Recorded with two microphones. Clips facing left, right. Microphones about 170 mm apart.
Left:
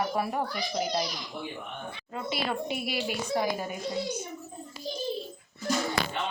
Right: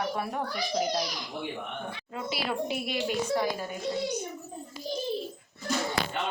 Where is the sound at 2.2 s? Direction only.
Centre (ahead or behind).